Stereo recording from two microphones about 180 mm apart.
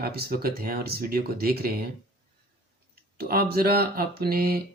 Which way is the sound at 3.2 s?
55° right (ahead or behind).